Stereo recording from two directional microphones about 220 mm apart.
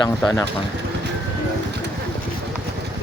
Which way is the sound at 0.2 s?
10° left (ahead or behind).